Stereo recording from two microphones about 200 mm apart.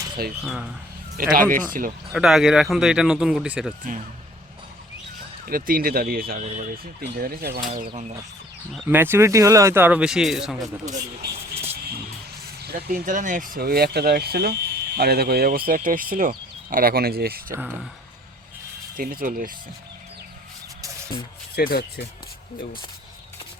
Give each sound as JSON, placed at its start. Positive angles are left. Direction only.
{"t": 0.4, "sound": "speech", "side_deg": -5}
{"t": 1.1, "sound": "speech", "side_deg": -45}
{"t": 2.1, "sound": "speech", "side_deg": 0}
{"t": 5.5, "sound": "speech", "side_deg": -45}
{"t": 8.7, "sound": "speech", "side_deg": -5}
{"t": 11.2, "sound": "speech", "side_deg": -50}
{"t": 12.6, "sound": "speech", "side_deg": -45}
{"t": 17.5, "sound": "speech", "side_deg": -10}
{"t": 18.9, "sound": "speech", "side_deg": -45}
{"t": 21.5, "sound": "speech", "side_deg": 50}